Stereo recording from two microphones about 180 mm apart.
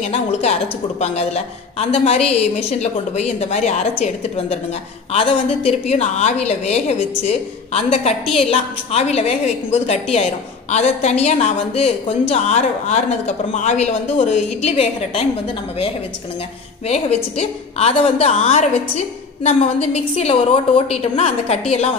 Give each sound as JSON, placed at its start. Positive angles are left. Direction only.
{"t": 0.0, "sound": "a woman's voice", "side_deg": 35}